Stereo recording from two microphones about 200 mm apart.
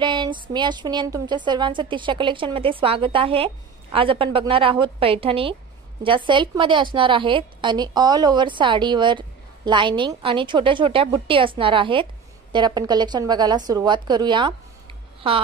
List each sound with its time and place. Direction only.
0.0 s a woman's voice: 25° right (ahead or behind)